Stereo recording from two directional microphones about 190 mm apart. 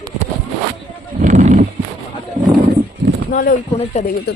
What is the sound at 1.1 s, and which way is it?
Horse, 40° right (ahead or behind).